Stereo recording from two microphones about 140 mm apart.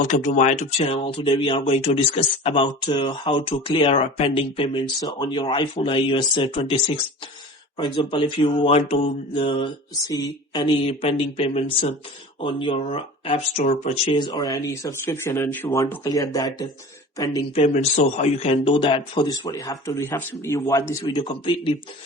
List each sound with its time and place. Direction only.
0.0 s speech: 60° left (ahead or behind)
14.2 s speech: 35° left (ahead or behind)
17.5 s speech: 50° left (ahead or behind)